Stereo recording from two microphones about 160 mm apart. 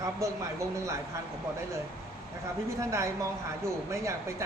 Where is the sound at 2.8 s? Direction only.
20° right (ahead or behind).